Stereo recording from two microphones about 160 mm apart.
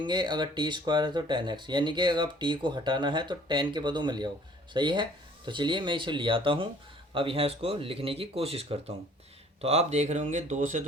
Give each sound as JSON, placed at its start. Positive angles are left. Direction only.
{"t": 0.0, "sound": "speech", "side_deg": -30}